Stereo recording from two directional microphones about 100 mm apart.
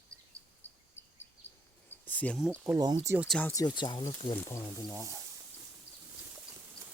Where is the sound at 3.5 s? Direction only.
35° left (ahead or behind).